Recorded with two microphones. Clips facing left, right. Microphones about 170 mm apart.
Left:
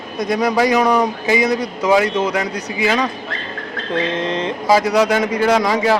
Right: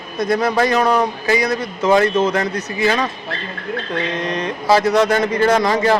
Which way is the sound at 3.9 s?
25° left (ahead or behind).